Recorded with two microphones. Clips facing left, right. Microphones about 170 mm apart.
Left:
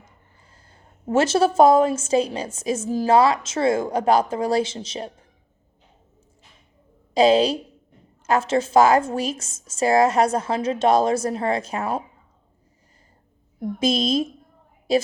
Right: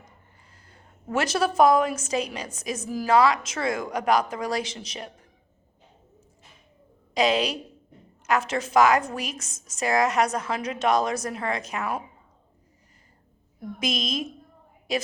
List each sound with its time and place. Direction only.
0.7 s a woman's voice: 25° left (ahead or behind)
7.1 s a woman's voice: 30° left (ahead or behind)
13.7 s a woman's voice: 30° left (ahead or behind)